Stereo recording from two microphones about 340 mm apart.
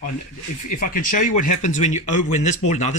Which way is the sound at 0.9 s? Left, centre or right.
Left.